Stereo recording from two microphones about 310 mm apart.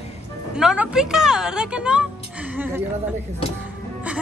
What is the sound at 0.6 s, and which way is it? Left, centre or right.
A woman's voice, centre.